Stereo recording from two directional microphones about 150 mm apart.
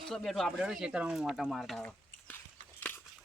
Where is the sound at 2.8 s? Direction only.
15° left (ahead or behind).